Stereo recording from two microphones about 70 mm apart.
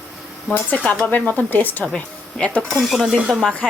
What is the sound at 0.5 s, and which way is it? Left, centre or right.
Speech, left.